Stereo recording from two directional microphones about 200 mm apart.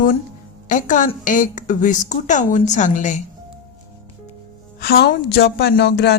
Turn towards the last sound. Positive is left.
turn(degrees=55)  # may be behind; listen again after turning